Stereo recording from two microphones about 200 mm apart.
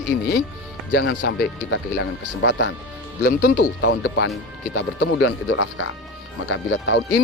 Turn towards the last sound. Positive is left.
turn(degrees=70)  # may be behind; listen again after turning